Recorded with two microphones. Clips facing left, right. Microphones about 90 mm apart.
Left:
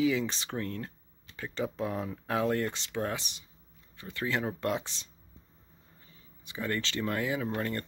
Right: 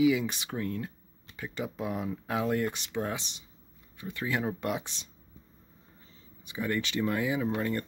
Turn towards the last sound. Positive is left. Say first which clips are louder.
# right 3 dB
turn(degrees=-10)  # may be behind; listen again after turning